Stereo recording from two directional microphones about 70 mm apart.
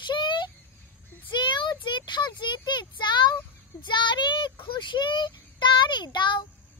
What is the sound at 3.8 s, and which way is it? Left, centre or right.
Child singing, left.